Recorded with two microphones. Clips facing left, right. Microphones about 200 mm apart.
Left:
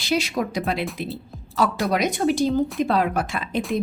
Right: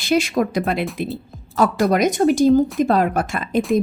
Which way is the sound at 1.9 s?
45° right (ahead or behind).